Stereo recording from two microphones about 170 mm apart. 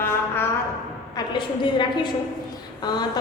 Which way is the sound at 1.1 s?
25° left (ahead or behind).